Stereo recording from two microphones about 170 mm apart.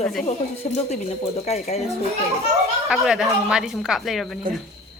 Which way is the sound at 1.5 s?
40° left (ahead or behind).